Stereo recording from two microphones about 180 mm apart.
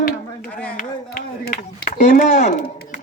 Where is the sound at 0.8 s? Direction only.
55° left (ahead or behind).